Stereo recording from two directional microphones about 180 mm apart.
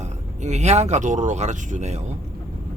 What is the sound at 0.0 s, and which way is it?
Speech, 40° right (ahead or behind).